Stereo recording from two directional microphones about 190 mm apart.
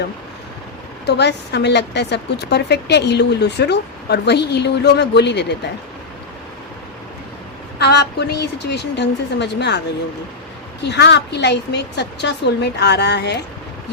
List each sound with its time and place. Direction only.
1.0 s a woman's voice: 60° left (ahead or behind)
7.8 s a woman's voice: 60° left (ahead or behind)
10.8 s a woman's voice: 65° left (ahead or behind)